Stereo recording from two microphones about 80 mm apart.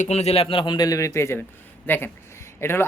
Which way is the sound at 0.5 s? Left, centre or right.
Left.